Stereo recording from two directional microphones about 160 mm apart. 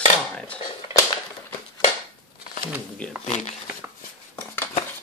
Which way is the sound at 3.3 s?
45° left (ahead or behind).